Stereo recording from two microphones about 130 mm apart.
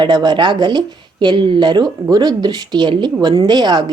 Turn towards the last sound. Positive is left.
turn(degrees=-35)  # may be behind; listen again after turning